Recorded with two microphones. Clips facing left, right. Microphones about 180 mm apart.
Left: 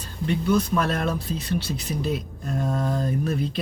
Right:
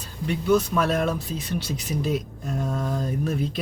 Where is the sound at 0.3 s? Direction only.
5° right (ahead or behind).